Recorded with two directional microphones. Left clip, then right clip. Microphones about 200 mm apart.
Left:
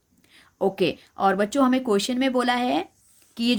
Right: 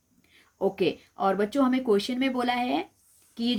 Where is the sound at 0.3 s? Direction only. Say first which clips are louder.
Left 3 dB; 35° left (ahead or behind).